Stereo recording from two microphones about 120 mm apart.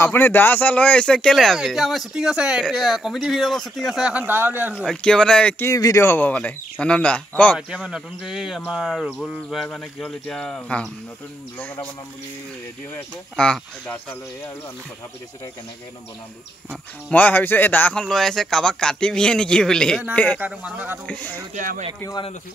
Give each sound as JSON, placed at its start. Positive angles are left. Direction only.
{"t": 0.0, "sound": "speech", "side_deg": 20}
{"t": 4.8, "sound": "speech", "side_deg": 5}
{"t": 5.7, "sound": "speech", "side_deg": 25}
{"t": 7.5, "sound": "speech", "side_deg": -5}
{"t": 13.4, "sound": "speech", "side_deg": 10}
{"t": 17.1, "sound": "speech", "side_deg": 15}
{"t": 20.3, "sound": "speech", "side_deg": -10}
{"t": 21.1, "sound": "speech", "side_deg": 15}